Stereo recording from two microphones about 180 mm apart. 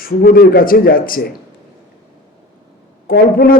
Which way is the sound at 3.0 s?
55° left (ahead or behind).